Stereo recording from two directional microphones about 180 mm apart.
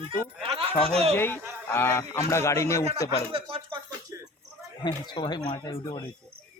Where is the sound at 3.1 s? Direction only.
30° right (ahead or behind).